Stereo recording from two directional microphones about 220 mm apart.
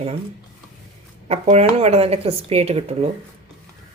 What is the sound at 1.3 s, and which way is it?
Speech, 30° right (ahead or behind).